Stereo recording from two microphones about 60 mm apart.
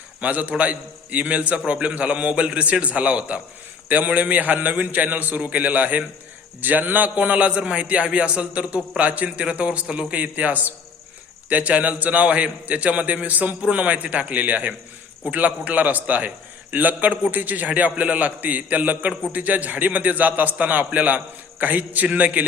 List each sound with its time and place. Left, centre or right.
0.2 s a man's voice: right